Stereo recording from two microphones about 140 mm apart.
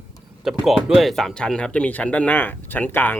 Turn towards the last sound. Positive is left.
turn(degrees=15)  # may be behind; listen again after turning